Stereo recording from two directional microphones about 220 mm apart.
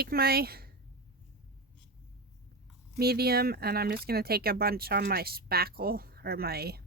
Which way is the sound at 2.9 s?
45° right (ahead or behind).